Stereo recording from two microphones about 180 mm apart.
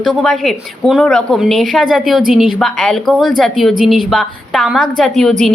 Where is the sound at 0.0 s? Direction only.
Centre (ahead or behind).